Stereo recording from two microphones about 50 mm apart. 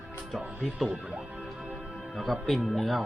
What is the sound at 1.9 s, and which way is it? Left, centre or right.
Music, centre.